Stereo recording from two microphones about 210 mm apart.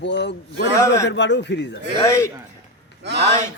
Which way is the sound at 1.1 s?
55° left (ahead or behind).